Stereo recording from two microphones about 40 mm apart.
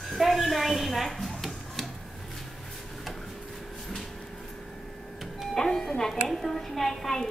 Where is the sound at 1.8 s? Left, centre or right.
Centre.